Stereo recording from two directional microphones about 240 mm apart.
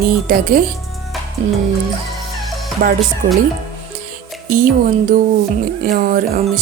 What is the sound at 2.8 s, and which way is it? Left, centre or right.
Speech, right.